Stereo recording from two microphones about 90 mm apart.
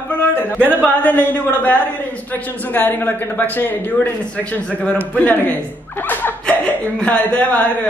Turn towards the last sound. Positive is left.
turn(degrees=15)  # may be behind; listen again after turning